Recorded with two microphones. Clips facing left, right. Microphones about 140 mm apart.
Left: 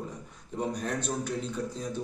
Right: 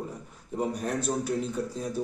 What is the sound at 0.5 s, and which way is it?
Speech, 10° right (ahead or behind).